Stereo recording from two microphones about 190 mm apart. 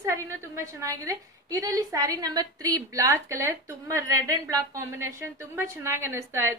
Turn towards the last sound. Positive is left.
turn(degrees=-15)  # may be behind; listen again after turning